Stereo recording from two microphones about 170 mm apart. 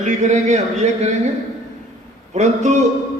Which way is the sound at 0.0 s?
45° right (ahead or behind).